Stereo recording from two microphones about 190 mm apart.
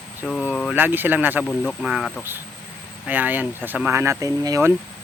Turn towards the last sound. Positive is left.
turn(degrees=-15)  # may be behind; listen again after turning